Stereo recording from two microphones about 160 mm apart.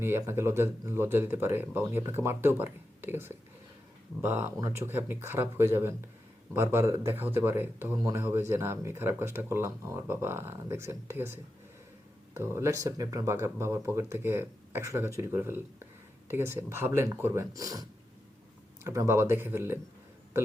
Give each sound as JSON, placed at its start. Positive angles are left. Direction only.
{"t": 0.0, "sound": "speech", "side_deg": -15}